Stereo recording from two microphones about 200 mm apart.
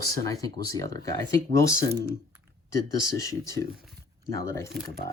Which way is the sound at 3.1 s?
15° left (ahead or behind).